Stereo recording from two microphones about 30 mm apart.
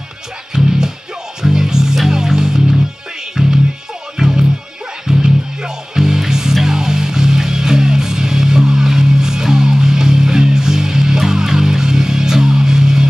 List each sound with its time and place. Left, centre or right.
0.5 s music: right